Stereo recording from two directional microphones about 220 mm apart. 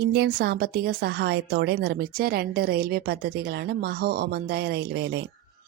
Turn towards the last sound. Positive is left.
turn(degrees=-50)  # may be behind; listen again after turning